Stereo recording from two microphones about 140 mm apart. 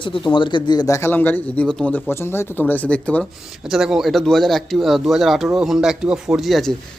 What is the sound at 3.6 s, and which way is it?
A man's voice, 5° right (ahead or behind).